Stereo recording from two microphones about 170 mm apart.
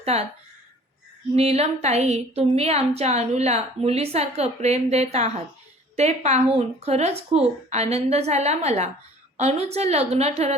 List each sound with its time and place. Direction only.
0.0 s speech: 40° right (ahead or behind)
1.4 s a woman's voice: 40° right (ahead or behind)